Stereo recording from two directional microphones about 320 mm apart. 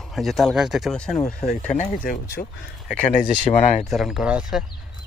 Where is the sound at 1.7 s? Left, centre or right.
Left.